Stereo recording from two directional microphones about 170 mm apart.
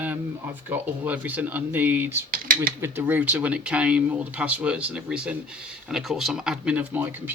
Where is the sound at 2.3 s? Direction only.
55° right (ahead or behind).